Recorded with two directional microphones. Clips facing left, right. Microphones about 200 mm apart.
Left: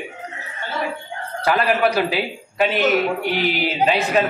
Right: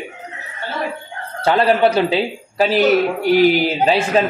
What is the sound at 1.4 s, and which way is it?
A man's voice, 30° right (ahead or behind).